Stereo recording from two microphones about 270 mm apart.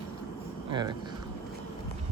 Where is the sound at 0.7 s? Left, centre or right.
Centre.